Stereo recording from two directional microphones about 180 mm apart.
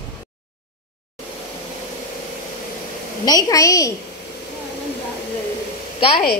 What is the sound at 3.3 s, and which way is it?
Speech, 20° left (ahead or behind).